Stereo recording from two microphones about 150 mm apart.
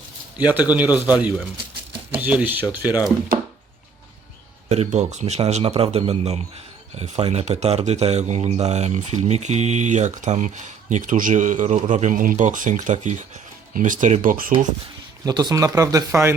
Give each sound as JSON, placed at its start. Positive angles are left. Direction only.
{"t": 0.3, "sound": "a man's voice", "side_deg": -10}
{"t": 4.7, "sound": "speech", "side_deg": -50}
{"t": 15.2, "sound": "speech", "side_deg": -30}